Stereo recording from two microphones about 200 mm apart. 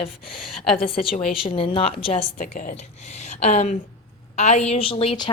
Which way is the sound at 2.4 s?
40° left (ahead or behind).